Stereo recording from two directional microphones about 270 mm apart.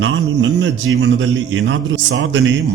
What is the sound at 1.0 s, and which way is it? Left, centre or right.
A man's voice, right.